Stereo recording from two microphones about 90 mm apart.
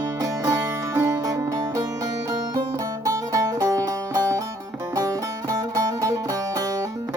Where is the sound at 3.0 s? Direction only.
40° right (ahead or behind).